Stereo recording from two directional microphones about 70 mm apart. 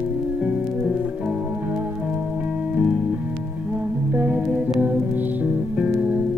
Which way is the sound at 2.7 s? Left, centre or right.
Centre.